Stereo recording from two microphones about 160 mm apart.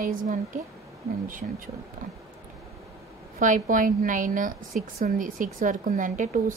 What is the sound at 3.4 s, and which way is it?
A woman's voice, 55° right (ahead or behind).